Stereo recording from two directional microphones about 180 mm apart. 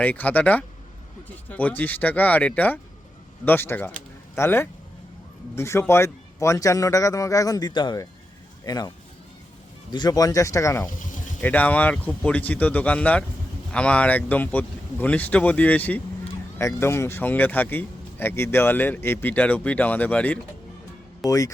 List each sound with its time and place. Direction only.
0.0 s a man's voice: 10° left (ahead or behind)
9.9 s speech: 20° left (ahead or behind)
21.2 s a man's voice: 20° left (ahead or behind)